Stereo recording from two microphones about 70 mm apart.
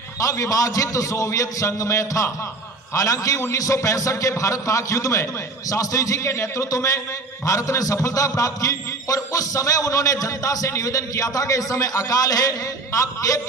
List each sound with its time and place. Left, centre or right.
0.2 s a man's voice: left